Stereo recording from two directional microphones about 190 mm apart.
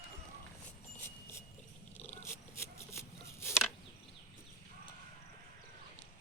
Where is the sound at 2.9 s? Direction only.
15° left (ahead or behind).